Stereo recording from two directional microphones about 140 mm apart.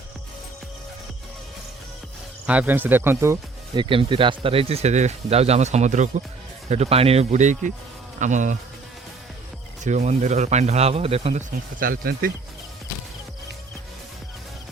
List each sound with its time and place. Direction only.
2.5 s speech: 10° right (ahead or behind)
3.8 s speech: 35° right (ahead or behind); by 6.2 s 60° right (ahead or behind)
6.7 s speech: 50° right (ahead or behind)
8.2 s insect: 60° right (ahead or behind)
9.8 s speech: 55° right (ahead or behind)
11.8 s speech: 90° right